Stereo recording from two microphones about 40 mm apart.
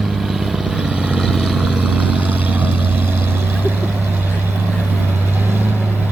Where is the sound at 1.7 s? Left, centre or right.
Right.